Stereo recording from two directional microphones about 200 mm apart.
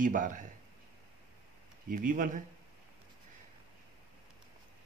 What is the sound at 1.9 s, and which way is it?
Speech, 45° right (ahead or behind).